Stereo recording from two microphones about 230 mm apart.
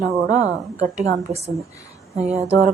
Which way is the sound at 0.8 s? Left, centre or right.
Right.